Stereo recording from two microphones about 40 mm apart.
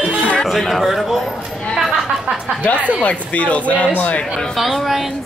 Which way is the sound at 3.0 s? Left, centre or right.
Left.